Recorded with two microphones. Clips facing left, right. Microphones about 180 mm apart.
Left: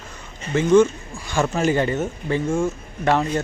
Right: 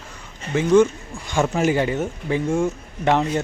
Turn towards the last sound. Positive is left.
turn(degrees=-15)  # may be behind; listen again after turning